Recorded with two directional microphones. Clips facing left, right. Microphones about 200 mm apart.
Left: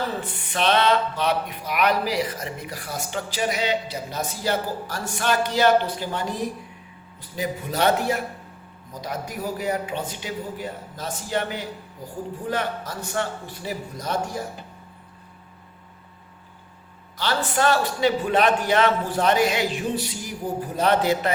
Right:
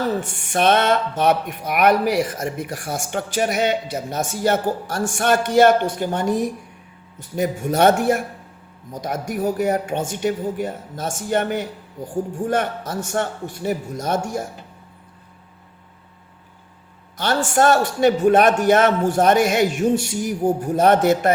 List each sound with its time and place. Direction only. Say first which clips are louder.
0.3 s speech: right 3 dB; 50° right (ahead or behind)
17.2 s speech: right 5 dB; 45° right (ahead or behind)